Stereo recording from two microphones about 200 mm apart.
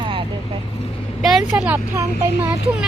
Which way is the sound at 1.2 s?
Centre (ahead or behind).